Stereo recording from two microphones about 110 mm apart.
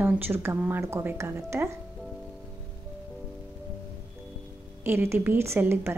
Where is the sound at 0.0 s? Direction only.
20° right (ahead or behind).